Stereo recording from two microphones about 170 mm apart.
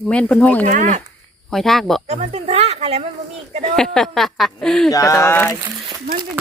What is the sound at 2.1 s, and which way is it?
Speech, 35° right (ahead or behind).